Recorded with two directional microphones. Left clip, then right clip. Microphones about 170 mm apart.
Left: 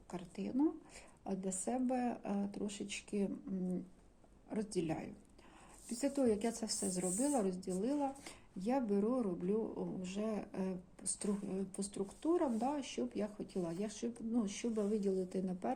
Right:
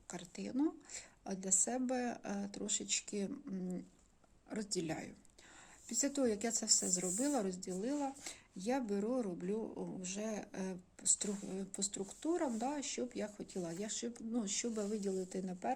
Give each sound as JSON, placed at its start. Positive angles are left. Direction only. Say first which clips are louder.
{"t": 0.1, "sound": "a woman's voice", "louder": "left 1 dB", "side_deg": -30}